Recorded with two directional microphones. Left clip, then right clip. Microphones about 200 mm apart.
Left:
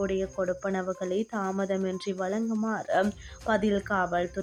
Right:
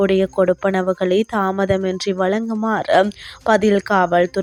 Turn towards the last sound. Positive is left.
turn(degrees=-40)  # may be behind; listen again after turning